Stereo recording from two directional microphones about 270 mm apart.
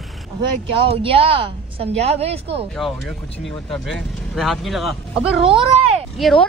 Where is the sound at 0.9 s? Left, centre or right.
Centre.